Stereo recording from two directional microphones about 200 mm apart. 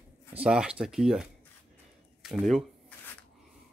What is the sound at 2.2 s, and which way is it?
Speech, centre (ahead or behind).